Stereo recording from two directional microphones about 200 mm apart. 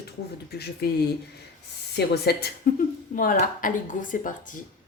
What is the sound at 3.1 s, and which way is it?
Speech, 40° left (ahead or behind).